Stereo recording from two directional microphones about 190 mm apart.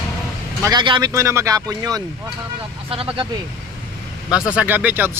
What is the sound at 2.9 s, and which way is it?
Speech, 30° right (ahead or behind).